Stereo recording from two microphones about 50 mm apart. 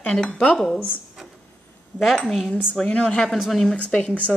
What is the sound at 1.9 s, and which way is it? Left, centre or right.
Speech, centre.